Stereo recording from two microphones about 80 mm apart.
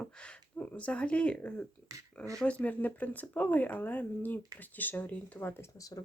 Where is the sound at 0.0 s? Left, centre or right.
Centre.